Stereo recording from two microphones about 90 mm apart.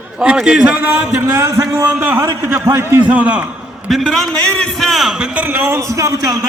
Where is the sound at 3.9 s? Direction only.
5° left (ahead or behind).